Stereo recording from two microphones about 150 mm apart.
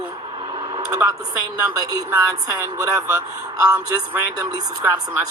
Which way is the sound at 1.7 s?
20° right (ahead or behind).